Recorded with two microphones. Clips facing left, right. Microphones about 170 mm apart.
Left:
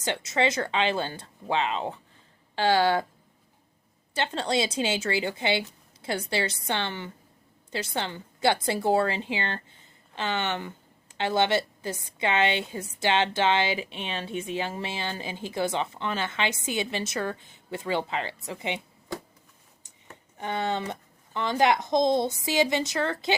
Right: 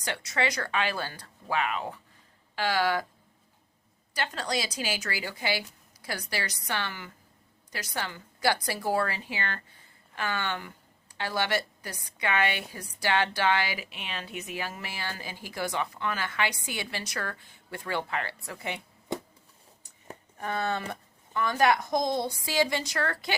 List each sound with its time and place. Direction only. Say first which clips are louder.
0.0 s a woman's voice: left 4 dB; 25° left (ahead or behind)
4.1 s a woman's voice: left 4 dB; 25° left (ahead or behind)
20.4 s a woman's voice: left 2 dB; 20° left (ahead or behind)